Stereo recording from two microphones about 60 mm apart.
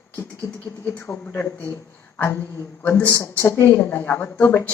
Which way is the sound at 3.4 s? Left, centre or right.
Left.